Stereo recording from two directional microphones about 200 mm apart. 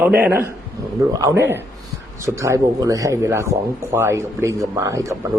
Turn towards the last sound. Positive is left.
turn(degrees=-15)  # may be behind; listen again after turning